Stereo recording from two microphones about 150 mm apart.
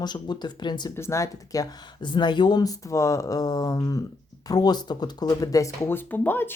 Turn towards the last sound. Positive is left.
turn(degrees=15)  # may be behind; listen again after turning